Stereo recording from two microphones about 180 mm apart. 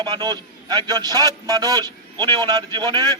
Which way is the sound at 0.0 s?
25° right (ahead or behind).